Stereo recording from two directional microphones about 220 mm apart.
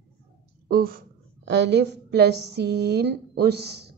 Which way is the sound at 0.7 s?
40° right (ahead or behind).